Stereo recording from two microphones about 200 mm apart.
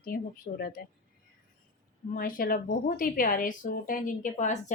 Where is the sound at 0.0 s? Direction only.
45° left (ahead or behind).